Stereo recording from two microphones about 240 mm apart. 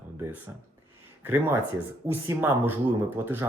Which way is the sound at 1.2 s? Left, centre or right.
Centre.